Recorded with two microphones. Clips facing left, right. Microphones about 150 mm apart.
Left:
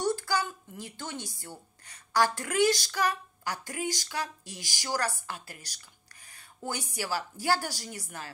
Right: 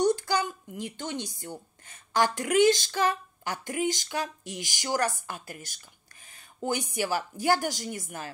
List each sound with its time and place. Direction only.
0.0 s a child's voice: 20° right (ahead or behind)